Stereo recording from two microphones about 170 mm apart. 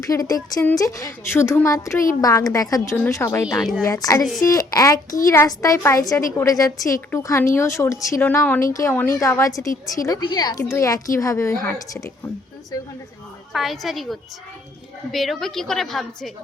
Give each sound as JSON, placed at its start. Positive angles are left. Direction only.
{"t": 0.0, "sound": "a woman's voice", "side_deg": 20}
{"t": 13.5, "sound": "a woman's voice", "side_deg": 0}